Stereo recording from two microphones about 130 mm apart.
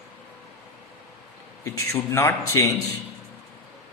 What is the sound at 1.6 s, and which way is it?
Speech, 20° left (ahead or behind).